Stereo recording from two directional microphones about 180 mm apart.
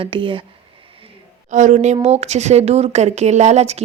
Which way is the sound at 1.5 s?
45° right (ahead or behind).